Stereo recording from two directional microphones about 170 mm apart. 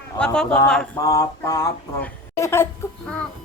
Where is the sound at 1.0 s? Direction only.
20° left (ahead or behind).